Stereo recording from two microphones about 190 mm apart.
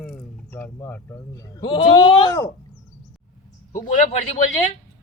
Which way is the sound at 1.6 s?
25° left (ahead or behind).